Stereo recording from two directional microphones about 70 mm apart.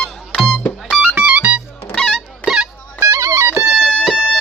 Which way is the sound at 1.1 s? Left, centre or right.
Right.